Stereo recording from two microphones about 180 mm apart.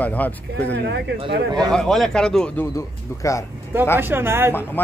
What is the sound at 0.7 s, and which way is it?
Speech, 70° right (ahead or behind).